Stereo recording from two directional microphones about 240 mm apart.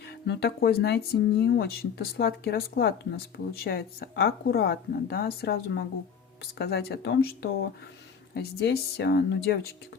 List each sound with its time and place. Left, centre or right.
0.0 s speech: left